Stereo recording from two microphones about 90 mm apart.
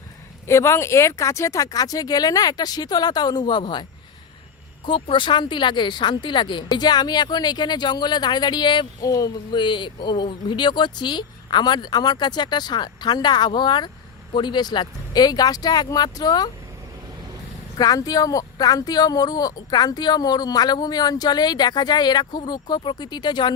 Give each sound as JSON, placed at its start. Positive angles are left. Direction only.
{"t": 0.4, "sound": "speech", "side_deg": 30}
{"t": 4.9, "sound": "speech", "side_deg": 70}
{"t": 9.0, "sound": "speech", "side_deg": 40}
{"t": 9.6, "sound": "speech", "side_deg": 60}
{"t": 17.7, "sound": "speech", "side_deg": 45}